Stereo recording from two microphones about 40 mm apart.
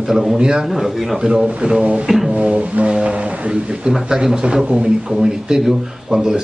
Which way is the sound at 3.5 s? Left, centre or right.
Centre.